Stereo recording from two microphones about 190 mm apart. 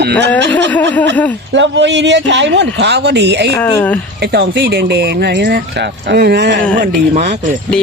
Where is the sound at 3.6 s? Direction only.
10° left (ahead or behind).